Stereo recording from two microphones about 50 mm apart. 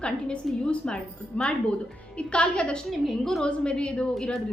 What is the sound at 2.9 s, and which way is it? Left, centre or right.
Speech, centre.